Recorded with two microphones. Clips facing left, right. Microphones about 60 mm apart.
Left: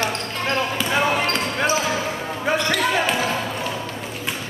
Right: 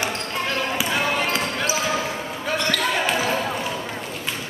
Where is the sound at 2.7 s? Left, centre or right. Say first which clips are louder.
Left 2 dB; centre.